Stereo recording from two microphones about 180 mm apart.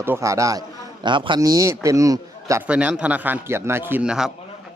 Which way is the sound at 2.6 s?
5° right (ahead or behind).